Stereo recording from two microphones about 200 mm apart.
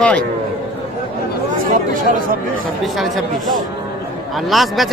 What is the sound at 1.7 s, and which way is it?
Speech, 45° right (ahead or behind).